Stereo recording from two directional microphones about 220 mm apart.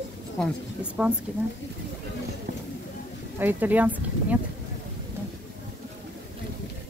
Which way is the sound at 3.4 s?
10° right (ahead or behind).